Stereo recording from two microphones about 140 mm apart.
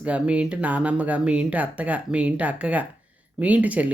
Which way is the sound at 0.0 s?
10° right (ahead or behind).